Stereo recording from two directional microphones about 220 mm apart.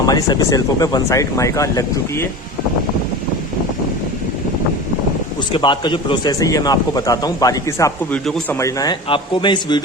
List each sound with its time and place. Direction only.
0.0 s a man's voice: 15° left (ahead or behind)
5.5 s a man's voice: 20° left (ahead or behind)